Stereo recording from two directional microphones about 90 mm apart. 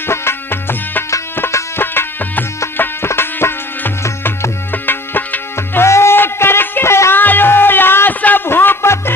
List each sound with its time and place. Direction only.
0.1 s music: 25° left (ahead or behind)